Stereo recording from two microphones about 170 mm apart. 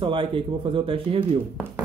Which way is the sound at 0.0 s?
30° right (ahead or behind).